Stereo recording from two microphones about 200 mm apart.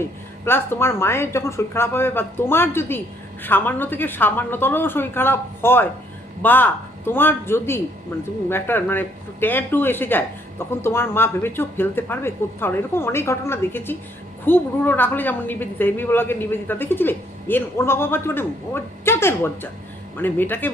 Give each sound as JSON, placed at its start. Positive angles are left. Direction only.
{"t": 0.0, "sound": "a woman's voice", "side_deg": 10}